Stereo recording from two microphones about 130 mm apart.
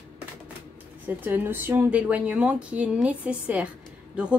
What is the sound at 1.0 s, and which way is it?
A woman's voice, 15° right (ahead or behind).